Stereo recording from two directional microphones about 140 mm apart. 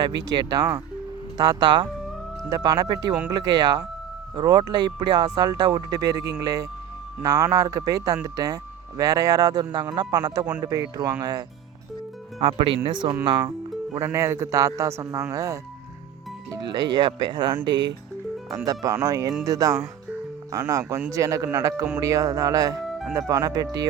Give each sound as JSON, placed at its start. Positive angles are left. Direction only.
{"t": 0.0, "sound": "speech", "side_deg": -30}
{"t": 12.4, "sound": "speech", "side_deg": -40}
{"t": 13.9, "sound": "speech", "side_deg": -20}
{"t": 22.9, "sound": "music", "side_deg": 0}
{"t": 23.1, "sound": "speech", "side_deg": -25}